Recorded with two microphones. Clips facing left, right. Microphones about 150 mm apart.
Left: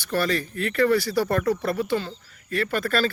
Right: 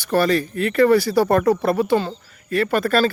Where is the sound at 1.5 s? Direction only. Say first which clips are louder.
Right 6 dB; 75° right (ahead or behind).